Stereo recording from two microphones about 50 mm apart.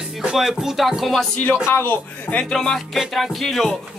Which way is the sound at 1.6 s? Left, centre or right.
Left.